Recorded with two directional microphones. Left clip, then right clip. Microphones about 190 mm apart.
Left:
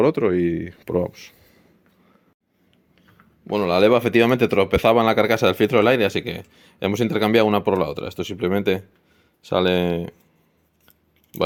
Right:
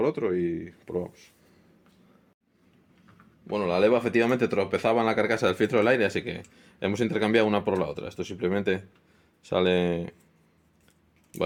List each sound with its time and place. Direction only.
0.0 s speech: 60° left (ahead or behind)
3.4 s speech: 55° left (ahead or behind); by 10.2 s 35° left (ahead or behind)